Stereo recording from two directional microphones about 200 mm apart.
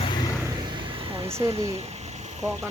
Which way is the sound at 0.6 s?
25° right (ahead or behind).